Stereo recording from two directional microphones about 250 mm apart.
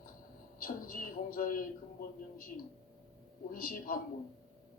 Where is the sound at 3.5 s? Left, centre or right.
Left.